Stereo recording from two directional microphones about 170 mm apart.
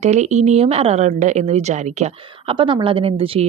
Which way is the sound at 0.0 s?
40° right (ahead or behind).